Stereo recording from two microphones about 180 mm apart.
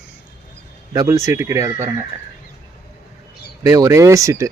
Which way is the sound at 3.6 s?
20° right (ahead or behind).